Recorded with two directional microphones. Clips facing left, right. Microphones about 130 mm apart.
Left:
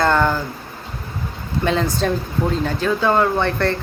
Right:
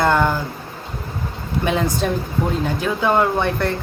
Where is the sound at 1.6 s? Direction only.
20° right (ahead or behind).